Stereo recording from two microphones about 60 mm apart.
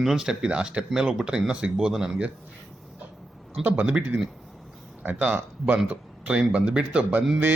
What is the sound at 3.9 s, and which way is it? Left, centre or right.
Speech, centre.